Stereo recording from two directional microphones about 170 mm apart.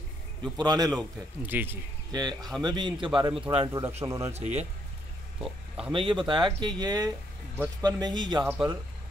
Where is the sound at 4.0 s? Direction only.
15° right (ahead or behind).